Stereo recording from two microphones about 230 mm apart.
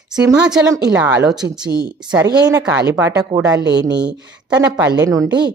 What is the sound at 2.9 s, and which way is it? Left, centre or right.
Speech, centre.